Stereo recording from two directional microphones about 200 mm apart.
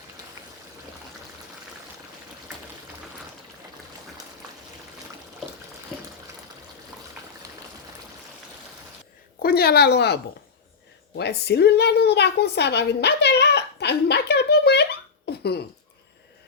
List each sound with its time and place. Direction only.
9.4 s speech: 50° left (ahead or behind)
11.2 s a woman's voice: 55° left (ahead or behind)
15.3 s a sound: 55° left (ahead or behind)